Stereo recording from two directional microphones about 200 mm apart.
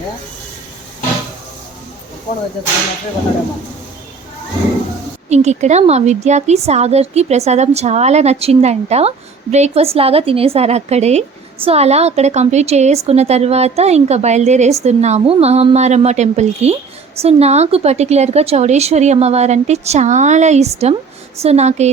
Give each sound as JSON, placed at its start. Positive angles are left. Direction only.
{"t": 5.3, "sound": "a woman's voice", "side_deg": -35}